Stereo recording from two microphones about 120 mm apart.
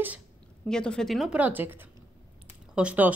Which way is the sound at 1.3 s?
15° right (ahead or behind).